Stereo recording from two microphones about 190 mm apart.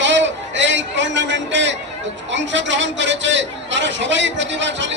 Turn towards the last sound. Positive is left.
turn(degrees=-70)  # may be behind; listen again after turning